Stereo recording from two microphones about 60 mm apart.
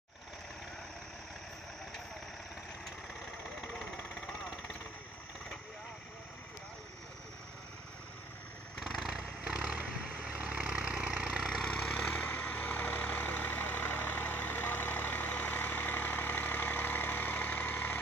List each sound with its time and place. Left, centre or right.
3.7 s vehicle: centre
8.8 s vehicle: centre
11.6 s vehicle: centre